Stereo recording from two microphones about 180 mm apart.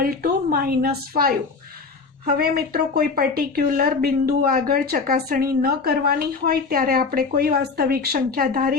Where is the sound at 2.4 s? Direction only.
60° right (ahead or behind).